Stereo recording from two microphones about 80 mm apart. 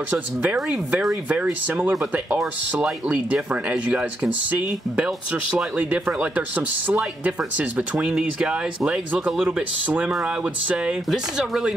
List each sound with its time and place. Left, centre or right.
0.1 s speech: centre